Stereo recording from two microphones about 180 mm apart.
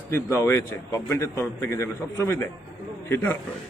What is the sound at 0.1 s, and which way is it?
A man's voice, 15° left (ahead or behind).